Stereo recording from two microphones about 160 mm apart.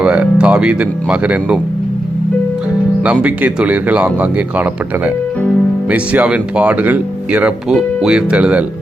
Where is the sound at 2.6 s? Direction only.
10° right (ahead or behind).